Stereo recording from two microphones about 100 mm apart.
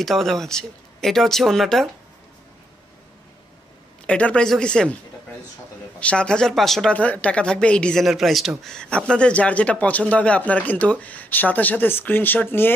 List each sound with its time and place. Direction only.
0.0 s speech: centre (ahead or behind)
4.0 s a man's voice: 10° left (ahead or behind)
5.9 s a man's voice: 10° left (ahead or behind)
7.0 s a man's voice: 15° left (ahead or behind)
8.0 s a man's voice: centre (ahead or behind); by 12.7 s 20° left (ahead or behind)